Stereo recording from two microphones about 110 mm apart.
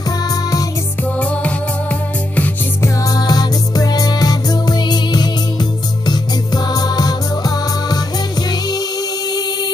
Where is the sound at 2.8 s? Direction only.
35° left (ahead or behind).